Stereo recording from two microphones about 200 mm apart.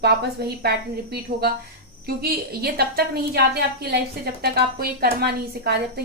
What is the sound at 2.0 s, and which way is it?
A woman's voice, 50° right (ahead or behind).